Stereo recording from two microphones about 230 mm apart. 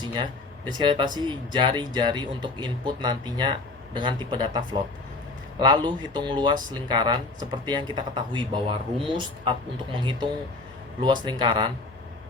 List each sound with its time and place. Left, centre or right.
0.7 s speech: centre